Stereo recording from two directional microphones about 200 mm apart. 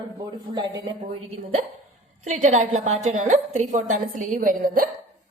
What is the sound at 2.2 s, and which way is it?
A woman's voice, 35° right (ahead or behind).